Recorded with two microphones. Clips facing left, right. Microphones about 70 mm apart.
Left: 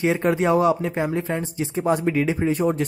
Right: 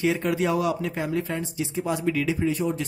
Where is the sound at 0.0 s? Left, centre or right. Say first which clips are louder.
Left 4 dB; left.